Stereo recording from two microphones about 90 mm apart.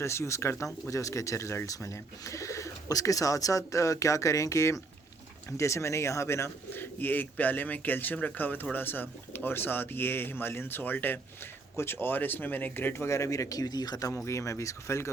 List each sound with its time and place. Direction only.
0.0 s speech: 30° left (ahead or behind); by 14.1 s 50° left (ahead or behind)
14.3 s speech: 35° left (ahead or behind)